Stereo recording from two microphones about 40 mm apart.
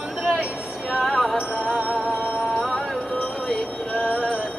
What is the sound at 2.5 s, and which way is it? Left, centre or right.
Music, centre.